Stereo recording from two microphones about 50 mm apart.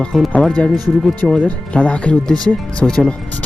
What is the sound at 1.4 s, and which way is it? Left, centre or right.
Speech, left.